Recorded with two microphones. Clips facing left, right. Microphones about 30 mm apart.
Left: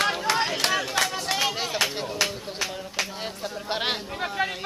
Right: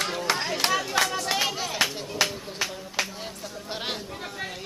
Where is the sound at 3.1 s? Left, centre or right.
Left.